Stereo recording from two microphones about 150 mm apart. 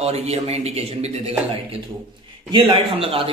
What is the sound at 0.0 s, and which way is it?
A man's voice, 45° right (ahead or behind).